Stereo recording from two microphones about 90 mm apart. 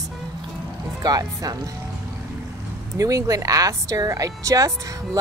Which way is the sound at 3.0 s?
40° right (ahead or behind).